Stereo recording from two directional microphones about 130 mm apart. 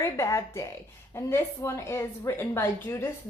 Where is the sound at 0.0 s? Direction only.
25° left (ahead or behind).